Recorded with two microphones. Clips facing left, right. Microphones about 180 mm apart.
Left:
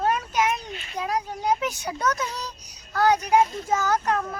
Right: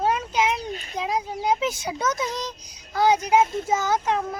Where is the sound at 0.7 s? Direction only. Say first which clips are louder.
Right 5 dB; 40° right (ahead or behind).